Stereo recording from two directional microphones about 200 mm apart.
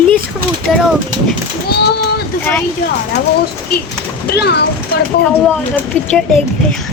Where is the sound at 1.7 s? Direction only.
55° left (ahead or behind).